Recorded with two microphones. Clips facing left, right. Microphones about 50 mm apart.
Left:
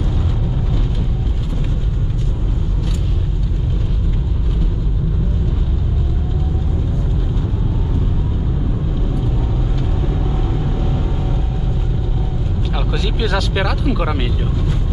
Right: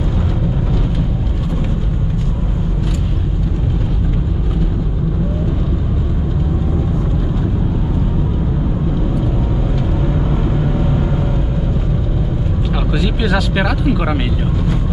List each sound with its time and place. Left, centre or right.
10.6 s vehicle: centre
12.9 s speech: centre